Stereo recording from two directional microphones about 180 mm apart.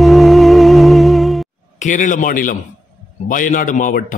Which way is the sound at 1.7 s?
45° left (ahead or behind).